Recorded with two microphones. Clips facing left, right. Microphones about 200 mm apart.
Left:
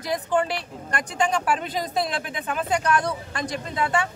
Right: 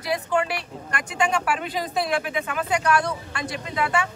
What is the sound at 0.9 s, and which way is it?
Speech, 40° left (ahead or behind).